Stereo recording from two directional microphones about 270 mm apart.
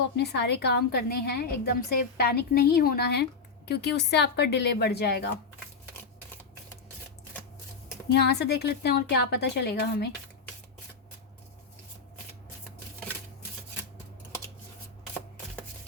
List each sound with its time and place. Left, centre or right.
0.2 s a woman's voice: left
8.1 s a woman's voice: left